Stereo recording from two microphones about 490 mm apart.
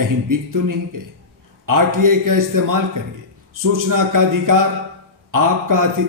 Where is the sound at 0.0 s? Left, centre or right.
Right.